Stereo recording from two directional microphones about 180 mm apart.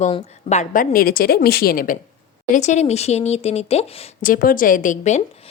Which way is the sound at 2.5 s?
40° left (ahead or behind).